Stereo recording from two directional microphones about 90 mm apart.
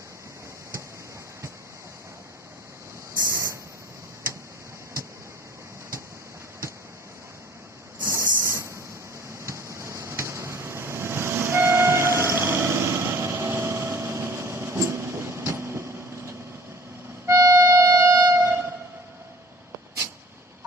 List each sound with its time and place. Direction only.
3.2 s vehicle: 30° right (ahead or behind)
8.0 s vehicle: 30° right (ahead or behind)
17.2 s music: 35° right (ahead or behind)